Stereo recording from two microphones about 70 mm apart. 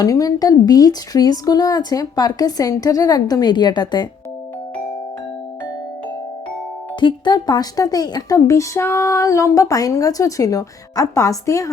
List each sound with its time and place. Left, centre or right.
0.0 s speech: left
7.0 s a woman's voice: left
8.4 s speech: left